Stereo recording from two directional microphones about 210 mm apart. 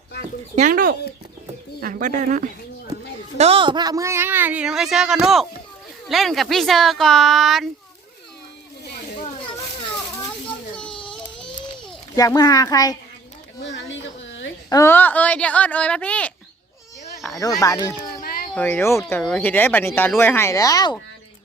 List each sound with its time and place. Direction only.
0.5 s speech: 40° right (ahead or behind)
3.3 s a woman's voice: 30° right (ahead or behind); by 7.7 s centre (ahead or behind)
9.2 s children playing: 25° left (ahead or behind)
10.8 s baby cry: 5° left (ahead or behind)
12.1 s speech: 15° left (ahead or behind)
13.6 s a sound: 60° left (ahead or behind)
14.7 s speech: 15° left (ahead or behind)
17.2 s a sound: centre (ahead or behind)
17.6 s speech: 15° left (ahead or behind)
18.2 s a sound: 45° left (ahead or behind)
18.5 s speech: 10° left (ahead or behind)